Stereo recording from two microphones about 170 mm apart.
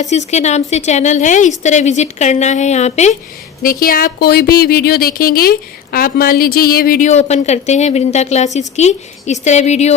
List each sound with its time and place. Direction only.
0.0 s a woman's voice: 40° left (ahead or behind)
3.6 s speech: 55° left (ahead or behind); by 9.9 s 40° left (ahead or behind)